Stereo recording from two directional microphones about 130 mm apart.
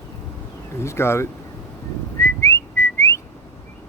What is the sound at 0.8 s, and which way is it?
Speech, 20° left (ahead or behind).